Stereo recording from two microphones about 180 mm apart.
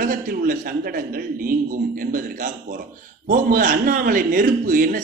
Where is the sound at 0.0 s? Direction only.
50° right (ahead or behind).